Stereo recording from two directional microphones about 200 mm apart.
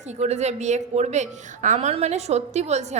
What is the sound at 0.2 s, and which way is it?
A woman's voice, 35° right (ahead or behind).